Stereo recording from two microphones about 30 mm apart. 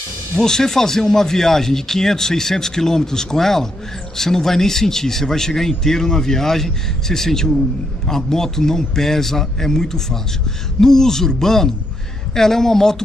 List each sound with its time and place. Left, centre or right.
0.4 s a man's voice: centre